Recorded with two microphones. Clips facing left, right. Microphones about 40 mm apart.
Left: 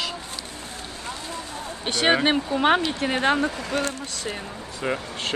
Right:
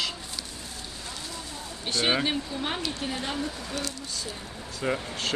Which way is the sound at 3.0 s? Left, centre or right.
Left.